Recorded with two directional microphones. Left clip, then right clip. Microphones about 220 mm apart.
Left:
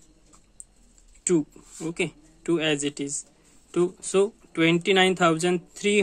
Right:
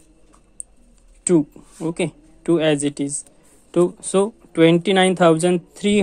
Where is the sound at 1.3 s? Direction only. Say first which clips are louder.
Right 6 dB; 15° right (ahead or behind).